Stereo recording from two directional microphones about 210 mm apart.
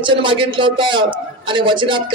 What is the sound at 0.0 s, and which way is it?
A man's voice, 25° right (ahead or behind).